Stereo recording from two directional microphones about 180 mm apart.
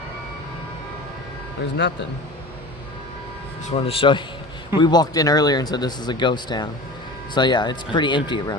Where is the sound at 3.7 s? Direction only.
30° left (ahead or behind).